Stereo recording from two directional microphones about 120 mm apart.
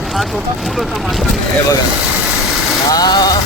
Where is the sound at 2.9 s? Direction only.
35° left (ahead or behind).